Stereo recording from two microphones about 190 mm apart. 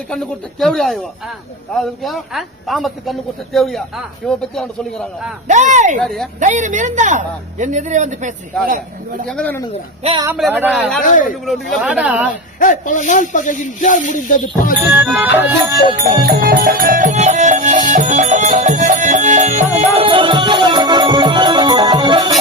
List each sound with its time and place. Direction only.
0.1 s a man's voice: 5° left (ahead or behind)
5.5 s speech: 40° right (ahead or behind)
6.0 s a man's voice: 5° left (ahead or behind)
6.4 s speech: 40° right (ahead or behind)
9.2 s speech: 5° left (ahead or behind)
10.0 s speech: 30° right (ahead or behind)
10.3 s music: 5° right (ahead or behind)
11.0 s speech: 45° left (ahead or behind)
11.4 s music: centre (ahead or behind)
12.3 s speech: 45° left (ahead or behind)
14.8 s music: 10° right (ahead or behind)
16.0 s music: 50° right (ahead or behind); by 22.4 s 25° right (ahead or behind)